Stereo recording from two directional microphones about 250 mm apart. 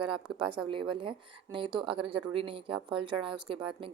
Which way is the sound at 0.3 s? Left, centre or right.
Centre.